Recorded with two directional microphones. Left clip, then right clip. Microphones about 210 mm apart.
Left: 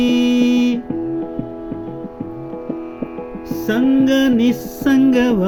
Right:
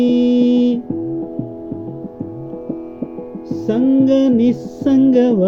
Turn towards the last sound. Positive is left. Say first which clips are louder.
# right 2 dB
turn(degrees=15)  # may be behind; listen again after turning